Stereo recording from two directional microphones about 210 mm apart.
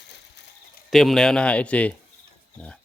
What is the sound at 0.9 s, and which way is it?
Speech, centre (ahead or behind).